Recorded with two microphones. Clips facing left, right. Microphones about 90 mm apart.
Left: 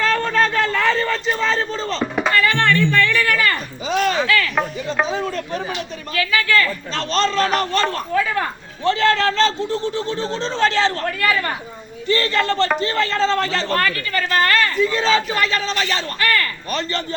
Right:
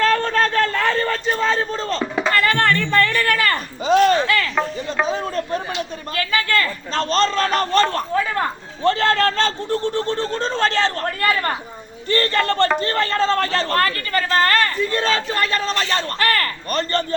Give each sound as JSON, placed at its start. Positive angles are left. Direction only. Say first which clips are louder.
{"t": 0.0, "sound": "a sound", "louder": "right 1 dB", "side_deg": -45}
{"t": 4.5, "sound": "music", "louder": "even", "side_deg": 10}
{"t": 5.0, "sound": "a man's voice", "louder": "right 1 dB", "side_deg": -40}